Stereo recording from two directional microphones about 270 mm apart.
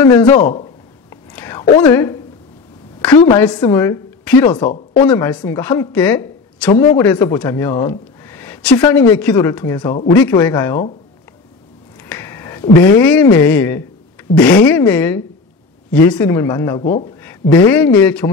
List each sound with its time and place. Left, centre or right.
0.0 s a woman's voice: centre
0.4 s speech: left
1.1 s whispering: centre
1.8 s a woman's voice: centre
3.3 s a woman's voice: centre
12.1 s a woman's voice: centre